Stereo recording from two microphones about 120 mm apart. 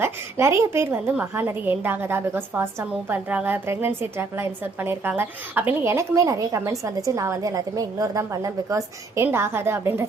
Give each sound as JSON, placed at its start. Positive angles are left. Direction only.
{"t": 0.0, "sound": "a woman's voice", "side_deg": -20}